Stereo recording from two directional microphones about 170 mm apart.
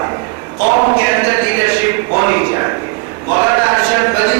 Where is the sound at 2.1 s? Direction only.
20° right (ahead or behind).